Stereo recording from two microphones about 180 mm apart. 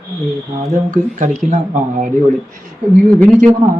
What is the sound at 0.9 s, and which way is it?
Speech, 45° right (ahead or behind).